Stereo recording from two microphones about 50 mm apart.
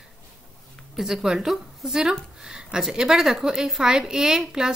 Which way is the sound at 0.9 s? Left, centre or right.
Centre.